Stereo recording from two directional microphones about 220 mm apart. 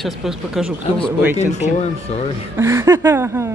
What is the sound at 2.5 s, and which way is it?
Speech, 10° right (ahead or behind).